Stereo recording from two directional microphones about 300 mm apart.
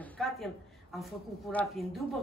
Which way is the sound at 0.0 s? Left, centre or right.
Centre.